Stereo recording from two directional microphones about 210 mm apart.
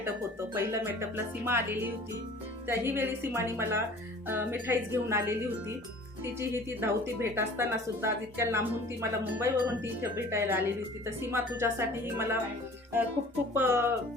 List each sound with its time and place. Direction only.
0.5 s speech: 10° right (ahead or behind)
6.4 s speech: 10° right (ahead or behind)
13.5 s speech: 10° right (ahead or behind)